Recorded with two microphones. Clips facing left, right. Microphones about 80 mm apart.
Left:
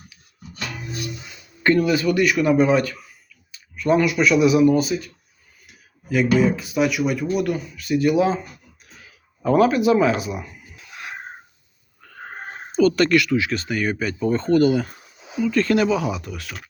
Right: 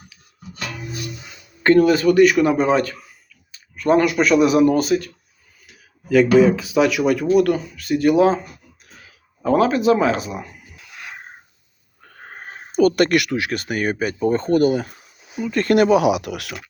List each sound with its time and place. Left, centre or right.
1.6 s speech: right
3.5 s speech: right
6.1 s speech: right
7.3 s speech: right
9.4 s speech: right
12.7 s speech: right